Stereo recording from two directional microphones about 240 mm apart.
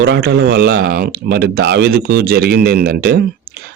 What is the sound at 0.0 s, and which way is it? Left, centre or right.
Speech, right.